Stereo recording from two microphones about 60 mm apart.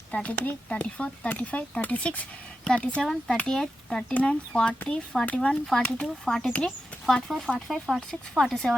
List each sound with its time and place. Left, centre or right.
0.1 s speech: left
3.0 s speech: centre
6.0 s speech: centre